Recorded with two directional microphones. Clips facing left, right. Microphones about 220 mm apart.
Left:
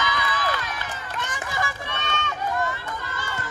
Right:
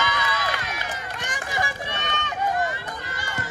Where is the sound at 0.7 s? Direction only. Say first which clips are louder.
Even; 15° right (ahead or behind).